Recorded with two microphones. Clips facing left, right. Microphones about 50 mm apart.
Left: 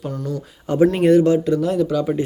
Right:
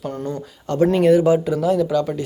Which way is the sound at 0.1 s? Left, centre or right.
Right.